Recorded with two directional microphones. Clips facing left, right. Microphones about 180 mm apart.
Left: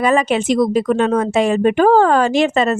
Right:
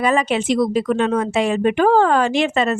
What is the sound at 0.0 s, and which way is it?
Speech, 45° left (ahead or behind).